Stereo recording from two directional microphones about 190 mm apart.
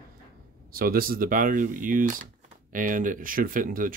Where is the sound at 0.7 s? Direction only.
50° right (ahead or behind).